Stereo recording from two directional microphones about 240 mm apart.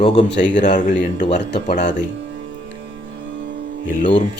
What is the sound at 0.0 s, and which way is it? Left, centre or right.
Speech, left.